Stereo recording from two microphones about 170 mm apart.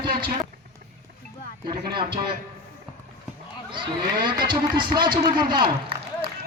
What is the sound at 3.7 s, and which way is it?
A man's voice, 25° right (ahead or behind).